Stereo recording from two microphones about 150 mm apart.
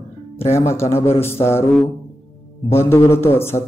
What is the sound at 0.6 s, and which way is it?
Speech, 15° left (ahead or behind).